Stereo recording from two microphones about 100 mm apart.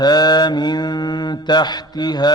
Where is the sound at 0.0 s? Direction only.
45° left (ahead or behind).